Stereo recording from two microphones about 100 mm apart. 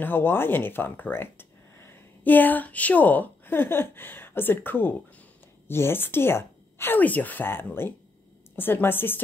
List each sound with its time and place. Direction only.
0.0 s a woman's voice: 20° left (ahead or behind)